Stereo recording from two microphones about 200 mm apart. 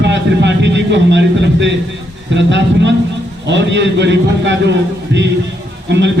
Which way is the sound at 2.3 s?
65° right (ahead or behind).